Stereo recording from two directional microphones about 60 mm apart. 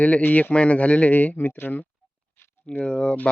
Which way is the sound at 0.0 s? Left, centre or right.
Left.